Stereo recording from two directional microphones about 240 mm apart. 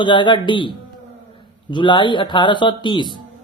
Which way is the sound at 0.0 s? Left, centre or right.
Centre.